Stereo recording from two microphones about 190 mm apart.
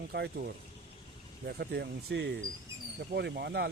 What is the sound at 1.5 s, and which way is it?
Speech, 60° right (ahead or behind).